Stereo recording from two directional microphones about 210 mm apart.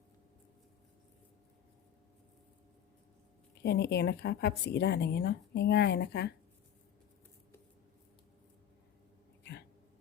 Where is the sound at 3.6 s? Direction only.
50° left (ahead or behind).